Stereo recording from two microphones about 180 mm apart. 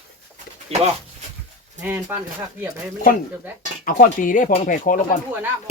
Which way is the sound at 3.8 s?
50° left (ahead or behind).